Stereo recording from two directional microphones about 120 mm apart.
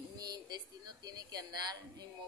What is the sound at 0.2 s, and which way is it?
A woman's voice, 35° right (ahead or behind).